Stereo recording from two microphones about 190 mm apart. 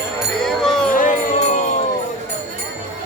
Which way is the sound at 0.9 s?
40° left (ahead or behind).